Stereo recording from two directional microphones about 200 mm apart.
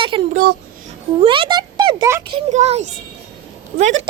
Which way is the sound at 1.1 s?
30° right (ahead or behind).